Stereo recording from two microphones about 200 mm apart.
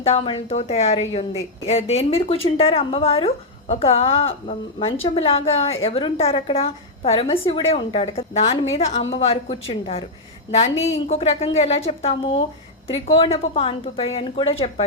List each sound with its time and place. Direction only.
0.0 s a woman's voice: 30° left (ahead or behind)
11.1 s a woman's voice: 30° left (ahead or behind)